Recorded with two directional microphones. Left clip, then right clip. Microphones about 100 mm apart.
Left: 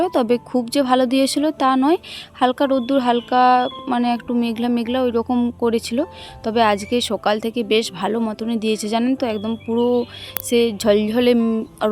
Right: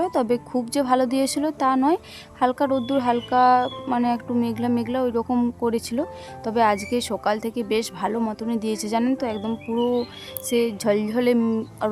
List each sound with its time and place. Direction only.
0.0 s speech: 35° left (ahead or behind)
11.3 s speech: 20° left (ahead or behind)
11.8 s speech: 40° left (ahead or behind)